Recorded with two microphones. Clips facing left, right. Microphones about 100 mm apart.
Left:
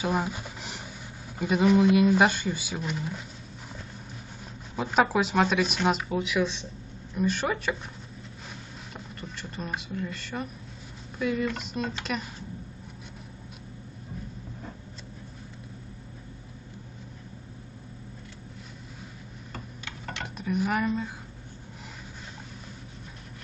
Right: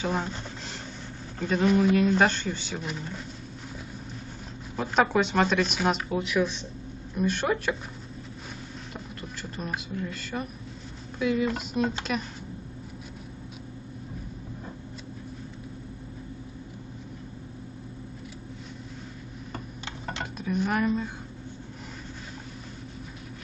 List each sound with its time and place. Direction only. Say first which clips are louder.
0.0 s a sound: left 1 dB; 10° left (ahead or behind)
1.4 s speech: left 1 dB; 5° left (ahead or behind)
4.7 s speech: even; 5° left (ahead or behind)
8.9 s speech: left 1 dB; centre (ahead or behind)
19.8 s typing: right 2 dB; 30° right (ahead or behind)
20.3 s speech: even; 5° left (ahead or behind)